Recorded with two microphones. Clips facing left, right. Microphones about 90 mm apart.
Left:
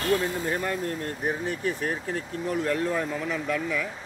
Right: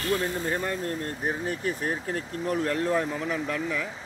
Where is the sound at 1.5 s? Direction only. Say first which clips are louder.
Left 1 dB; 35° right (ahead or behind).